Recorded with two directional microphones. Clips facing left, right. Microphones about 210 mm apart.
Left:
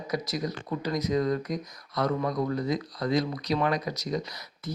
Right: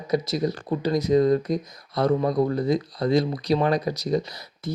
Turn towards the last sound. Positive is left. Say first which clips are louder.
# right 6 dB
turn(degrees=-30)  # may be behind; listen again after turning